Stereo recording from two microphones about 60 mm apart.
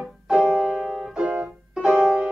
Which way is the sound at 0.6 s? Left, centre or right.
Centre.